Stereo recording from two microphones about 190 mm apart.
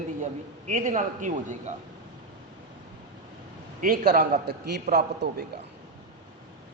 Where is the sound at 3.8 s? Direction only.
50° right (ahead or behind).